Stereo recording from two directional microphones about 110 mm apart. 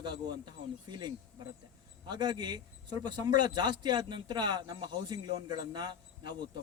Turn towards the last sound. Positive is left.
turn(degrees=-40)  # may be behind; listen again after turning